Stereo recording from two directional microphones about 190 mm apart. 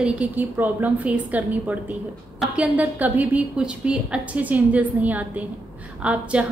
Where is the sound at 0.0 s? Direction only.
5° right (ahead or behind).